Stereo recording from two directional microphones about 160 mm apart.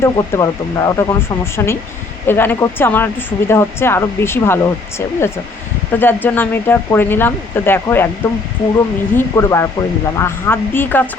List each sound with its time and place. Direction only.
0.0 s speech: 20° left (ahead or behind)
9.1 s speech: 15° left (ahead or behind)